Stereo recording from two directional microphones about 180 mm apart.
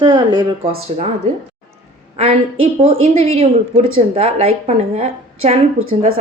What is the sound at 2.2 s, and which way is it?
Speech, 30° right (ahead or behind).